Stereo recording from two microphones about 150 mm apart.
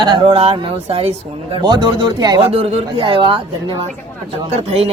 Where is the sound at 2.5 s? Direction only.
40° right (ahead or behind).